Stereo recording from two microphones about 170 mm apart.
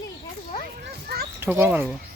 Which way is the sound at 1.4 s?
10° right (ahead or behind).